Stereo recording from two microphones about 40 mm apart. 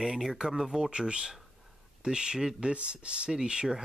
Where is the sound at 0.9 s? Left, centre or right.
Right.